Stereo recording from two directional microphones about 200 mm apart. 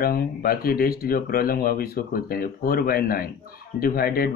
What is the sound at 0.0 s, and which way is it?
Speech, 45° left (ahead or behind).